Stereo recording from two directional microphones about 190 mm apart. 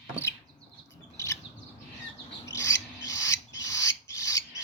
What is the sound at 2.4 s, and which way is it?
Filing, 15° left (ahead or behind).